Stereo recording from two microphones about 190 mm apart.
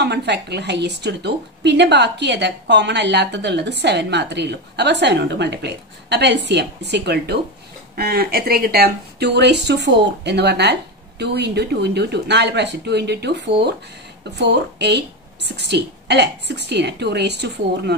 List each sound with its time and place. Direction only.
0.0 s a woman's voice: 60° right (ahead or behind)